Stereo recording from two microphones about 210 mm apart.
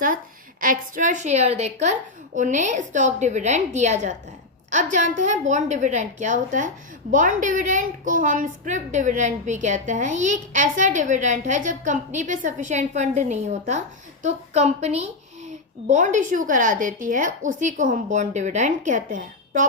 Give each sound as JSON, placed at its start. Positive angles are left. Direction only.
{"t": 0.6, "sound": "a woman's voice", "side_deg": -40}